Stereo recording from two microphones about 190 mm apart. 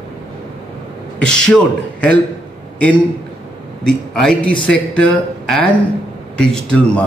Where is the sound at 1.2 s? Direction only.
5° left (ahead or behind).